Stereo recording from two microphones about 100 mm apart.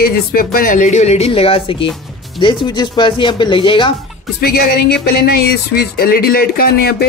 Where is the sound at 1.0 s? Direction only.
90° left; by 1.8 s 65° left (ahead or behind).